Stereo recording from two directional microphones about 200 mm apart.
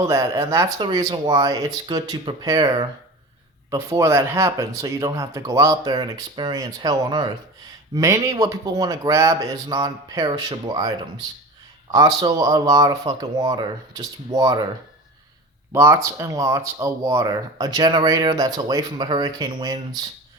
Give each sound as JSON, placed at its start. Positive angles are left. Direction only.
{"t": 0.0, "sound": "speech", "side_deg": -15}
{"t": 15.7, "sound": "speech", "side_deg": -15}